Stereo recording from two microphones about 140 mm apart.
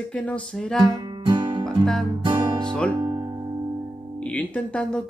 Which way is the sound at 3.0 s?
25° right (ahead or behind).